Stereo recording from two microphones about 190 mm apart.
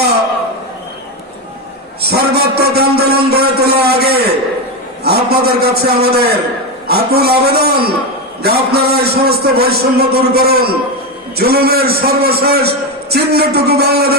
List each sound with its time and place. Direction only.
2.0 s a man's voice: 55° right (ahead or behind)